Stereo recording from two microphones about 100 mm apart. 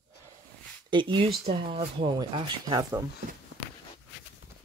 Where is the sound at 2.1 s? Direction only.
50° right (ahead or behind).